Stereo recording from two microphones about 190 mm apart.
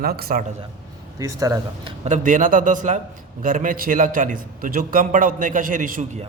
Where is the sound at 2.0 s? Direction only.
40° right (ahead or behind).